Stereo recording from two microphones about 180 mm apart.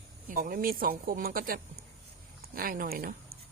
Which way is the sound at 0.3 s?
50° right (ahead or behind).